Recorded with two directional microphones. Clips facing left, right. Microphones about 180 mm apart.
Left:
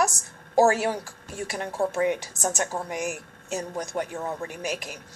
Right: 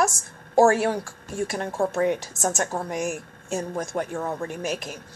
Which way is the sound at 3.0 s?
15° left (ahead or behind).